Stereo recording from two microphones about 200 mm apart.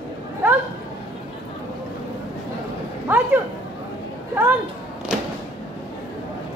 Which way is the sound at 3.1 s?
10° right (ahead or behind).